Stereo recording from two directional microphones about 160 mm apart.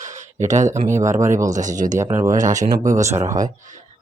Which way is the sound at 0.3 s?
50° right (ahead or behind).